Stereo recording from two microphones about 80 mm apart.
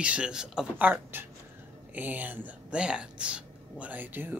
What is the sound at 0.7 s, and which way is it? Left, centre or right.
Speech, right.